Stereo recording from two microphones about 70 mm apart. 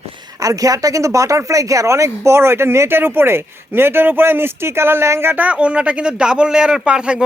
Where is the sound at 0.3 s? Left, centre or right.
Right.